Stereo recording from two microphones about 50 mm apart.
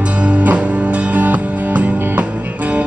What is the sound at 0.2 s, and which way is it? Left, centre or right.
Music, right.